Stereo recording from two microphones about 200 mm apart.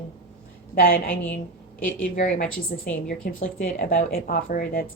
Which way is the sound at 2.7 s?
50° left (ahead or behind).